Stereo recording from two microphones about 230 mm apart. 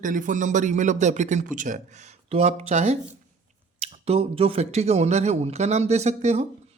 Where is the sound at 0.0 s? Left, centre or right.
Right.